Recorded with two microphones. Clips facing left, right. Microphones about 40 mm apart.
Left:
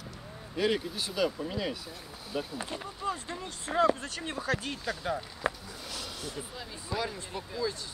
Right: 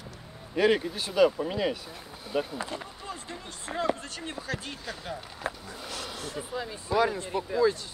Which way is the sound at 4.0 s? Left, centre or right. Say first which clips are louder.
Left 1 dB; left.